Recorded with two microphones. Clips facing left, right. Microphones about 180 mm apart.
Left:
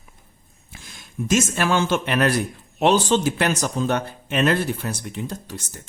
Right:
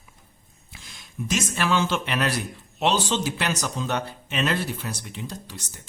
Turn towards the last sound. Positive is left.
turn(degrees=50)  # may be behind; listen again after turning